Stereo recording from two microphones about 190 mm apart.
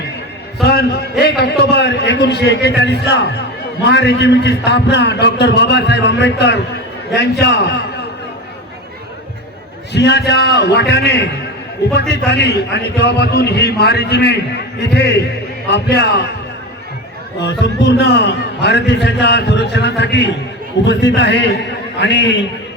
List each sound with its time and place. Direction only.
0.6 s a sound: 60° left (ahead or behind)
1.2 s a man's voice: 60° left (ahead or behind)
9.9 s a man's voice: 65° left (ahead or behind)
17.4 s a man's voice: 65° left (ahead or behind)